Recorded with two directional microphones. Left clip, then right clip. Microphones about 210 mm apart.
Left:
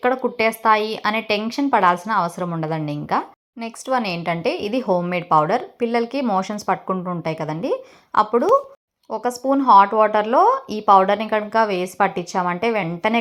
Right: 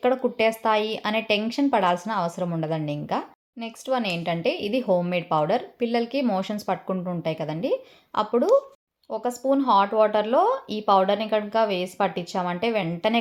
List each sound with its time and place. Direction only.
0.0 s a woman's voice: 5° left (ahead or behind)
8.1 s speech: 15° left (ahead or behind)